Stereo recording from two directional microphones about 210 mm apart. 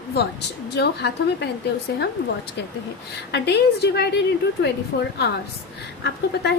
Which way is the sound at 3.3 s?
55° left (ahead or behind).